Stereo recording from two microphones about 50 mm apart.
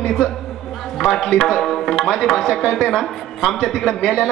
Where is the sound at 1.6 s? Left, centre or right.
Centre.